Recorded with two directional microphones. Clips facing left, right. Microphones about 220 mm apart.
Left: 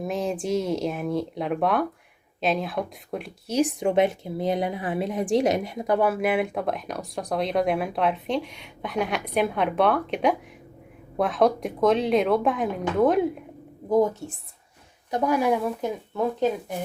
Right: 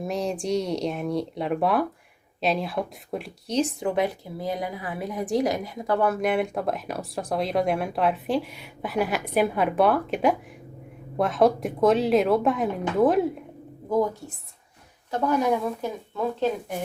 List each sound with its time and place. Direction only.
0.0 s a woman's voice: centre (ahead or behind)
3.8 s a woman's voice: 25° left (ahead or behind); by 13.3 s centre (ahead or behind)
15.1 s speech: 10° left (ahead or behind)